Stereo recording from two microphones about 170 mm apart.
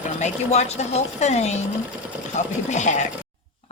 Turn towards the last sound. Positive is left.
turn(degrees=45)  # may be behind; listen again after turning